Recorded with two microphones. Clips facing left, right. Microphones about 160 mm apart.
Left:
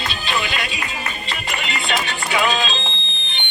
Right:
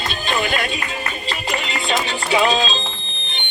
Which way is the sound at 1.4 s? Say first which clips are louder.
Right 2 dB; 30° right (ahead or behind).